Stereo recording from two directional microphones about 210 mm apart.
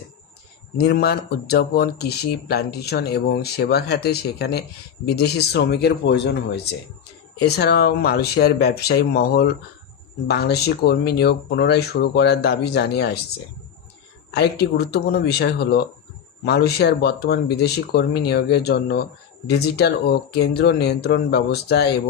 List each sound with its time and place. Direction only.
0.8 s speech: 50° left (ahead or behind)
14.3 s speech: 50° left (ahead or behind)